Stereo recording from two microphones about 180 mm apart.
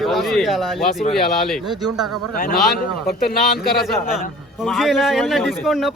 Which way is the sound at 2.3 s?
55° left (ahead or behind).